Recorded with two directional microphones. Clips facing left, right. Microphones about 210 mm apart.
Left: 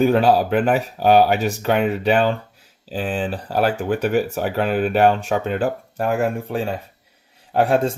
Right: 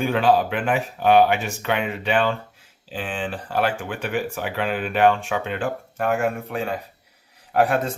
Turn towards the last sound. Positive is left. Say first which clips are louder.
# left 3 dB
turn(degrees=30)  # may be behind; listen again after turning